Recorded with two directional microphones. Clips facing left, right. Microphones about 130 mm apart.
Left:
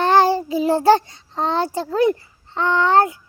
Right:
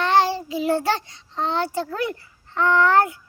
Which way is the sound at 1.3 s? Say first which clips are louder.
Left 3 dB; 35° left (ahead or behind).